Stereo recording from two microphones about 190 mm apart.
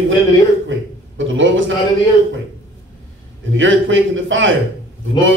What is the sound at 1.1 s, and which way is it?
Speech, 85° right.